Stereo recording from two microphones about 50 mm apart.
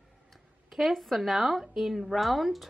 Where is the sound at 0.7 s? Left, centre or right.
Centre.